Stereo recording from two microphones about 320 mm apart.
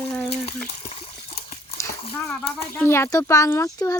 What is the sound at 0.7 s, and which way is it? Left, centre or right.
Speech, centre.